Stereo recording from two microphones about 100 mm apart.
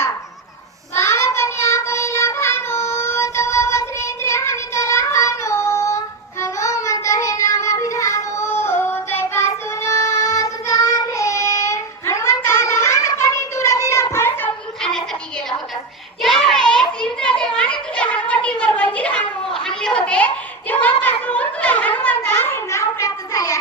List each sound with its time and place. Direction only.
0.9 s child singing: 30° left (ahead or behind)
16.2 s children playing: 5° left (ahead or behind)
17.6 s a sound: 10° left (ahead or behind); by 23.6 s 35° left (ahead or behind)